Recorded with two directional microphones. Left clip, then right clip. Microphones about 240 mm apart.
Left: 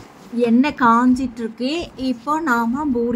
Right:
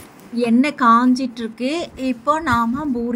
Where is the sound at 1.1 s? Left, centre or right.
Centre.